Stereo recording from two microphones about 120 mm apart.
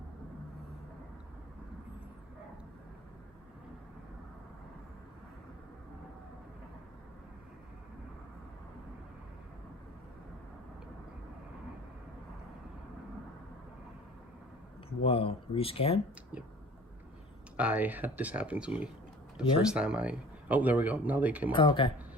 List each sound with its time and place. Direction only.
14.8 s speech: 50° left (ahead or behind)
17.6 s speech: 15° right (ahead or behind)
21.5 s speech: 45° left (ahead or behind)